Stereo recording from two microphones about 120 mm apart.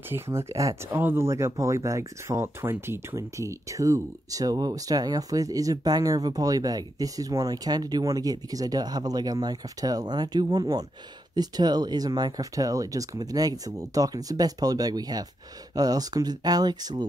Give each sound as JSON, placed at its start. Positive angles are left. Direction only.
{"t": 0.1, "sound": "speech", "side_deg": -20}